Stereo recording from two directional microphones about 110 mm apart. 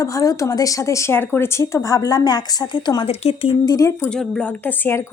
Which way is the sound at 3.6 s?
35° left (ahead or behind).